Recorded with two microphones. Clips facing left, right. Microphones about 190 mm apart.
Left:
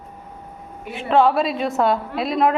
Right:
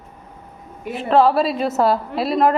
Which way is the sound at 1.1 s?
Centre (ahead or behind).